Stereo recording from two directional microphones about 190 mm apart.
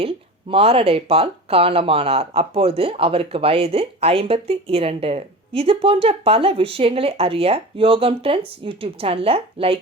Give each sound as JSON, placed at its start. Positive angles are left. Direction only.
{"t": 0.5, "sound": "speech", "side_deg": -30}